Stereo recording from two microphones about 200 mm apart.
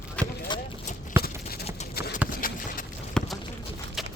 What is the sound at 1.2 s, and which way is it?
Clip-clop, 50° left (ahead or behind).